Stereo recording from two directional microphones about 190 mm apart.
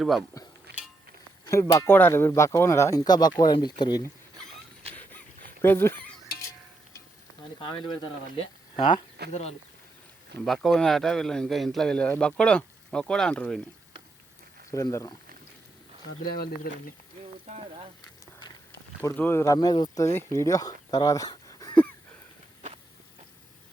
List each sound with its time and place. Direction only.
0.4 s a sound: 20° left (ahead or behind)
1.5 s speech: 15° left (ahead or behind)
5.5 s dog: 10° left (ahead or behind)
7.6 s speech: 25° left (ahead or behind)
10.4 s speech: centre (ahead or behind)
14.7 s speech: 15° left (ahead or behind)
16.2 s speech: 50° left (ahead or behind)
19.0 s speech: 10° left (ahead or behind)